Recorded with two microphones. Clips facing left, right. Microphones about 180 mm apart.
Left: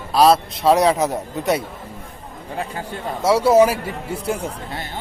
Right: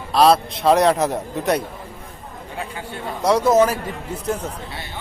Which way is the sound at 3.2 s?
5° left (ahead or behind).